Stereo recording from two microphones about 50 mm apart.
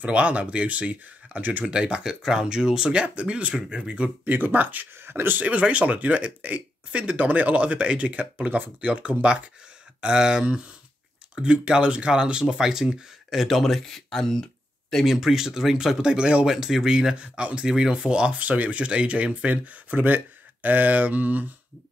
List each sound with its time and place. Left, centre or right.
0.0 s speech: right
1.6 s speech: centre
4.2 s speech: right
4.9 s speech: right
5.5 s speech: right; by 14.4 s centre
15.0 s speech: centre
16.0 s speech: centre
17.2 s speech: right